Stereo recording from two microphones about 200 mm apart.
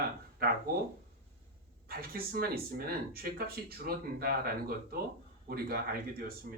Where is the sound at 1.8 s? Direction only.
50° right (ahead or behind).